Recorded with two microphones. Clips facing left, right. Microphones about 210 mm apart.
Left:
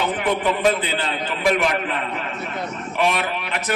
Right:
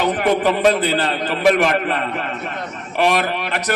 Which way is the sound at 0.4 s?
40° right (ahead or behind).